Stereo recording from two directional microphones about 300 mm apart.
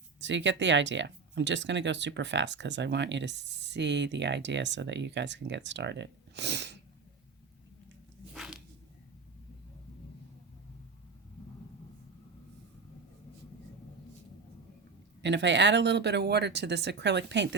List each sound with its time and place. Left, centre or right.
0.2 s speech: right
8.3 s a sound: centre
15.2 s speech: right